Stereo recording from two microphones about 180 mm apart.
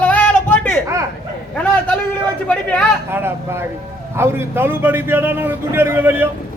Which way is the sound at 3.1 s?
15° right (ahead or behind).